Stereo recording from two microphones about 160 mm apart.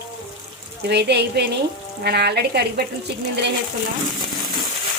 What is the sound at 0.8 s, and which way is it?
Speech, 90° right.